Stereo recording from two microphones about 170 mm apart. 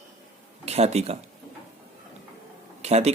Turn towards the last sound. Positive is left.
turn(degrees=-40)  # may be behind; listen again after turning